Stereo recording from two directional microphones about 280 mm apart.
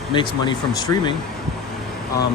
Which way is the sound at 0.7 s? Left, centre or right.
Centre.